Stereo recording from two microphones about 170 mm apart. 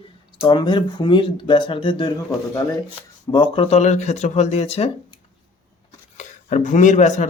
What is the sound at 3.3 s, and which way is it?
Speech, 30° left (ahead or behind).